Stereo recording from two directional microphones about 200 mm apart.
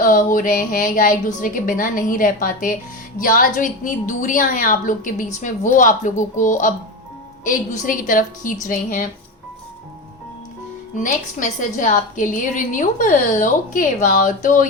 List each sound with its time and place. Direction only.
0.0 s a woman's voice: 40° left (ahead or behind)
10.9 s a woman's voice: 40° left (ahead or behind)